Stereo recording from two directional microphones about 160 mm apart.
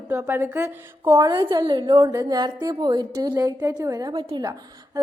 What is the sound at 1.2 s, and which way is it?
A woman's voice, 25° right (ahead or behind).